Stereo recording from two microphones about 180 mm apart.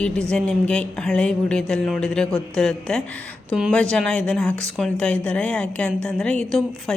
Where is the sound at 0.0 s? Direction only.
5° left (ahead or behind).